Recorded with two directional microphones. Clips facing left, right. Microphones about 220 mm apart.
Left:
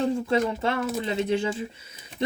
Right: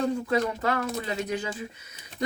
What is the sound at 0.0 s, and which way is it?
Speech, 25° left (ahead or behind).